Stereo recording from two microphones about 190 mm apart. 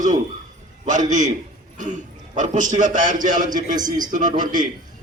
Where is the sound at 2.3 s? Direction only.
40° right (ahead or behind).